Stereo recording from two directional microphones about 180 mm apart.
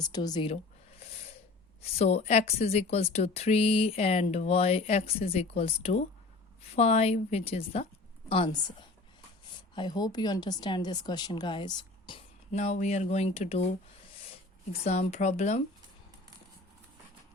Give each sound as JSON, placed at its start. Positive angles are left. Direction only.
{"t": 0.0, "sound": "a sound", "side_deg": 20}
{"t": 1.8, "sound": "a woman's voice", "side_deg": 35}
{"t": 9.7, "sound": "a woman's voice", "side_deg": 25}
{"t": 14.7, "sound": "speech", "side_deg": 40}